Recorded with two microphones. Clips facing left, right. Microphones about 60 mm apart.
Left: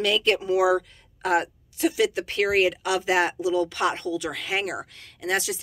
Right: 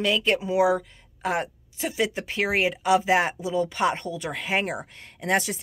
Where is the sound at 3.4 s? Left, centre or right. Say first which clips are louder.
Left 1 dB; right.